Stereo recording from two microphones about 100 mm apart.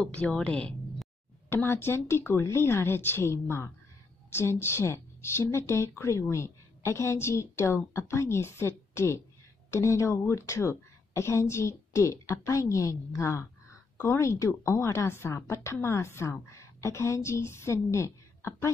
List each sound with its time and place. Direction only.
0.0 s a woman's voice: 10° left (ahead or behind)
1.5 s a woman's voice: 25° left (ahead or behind)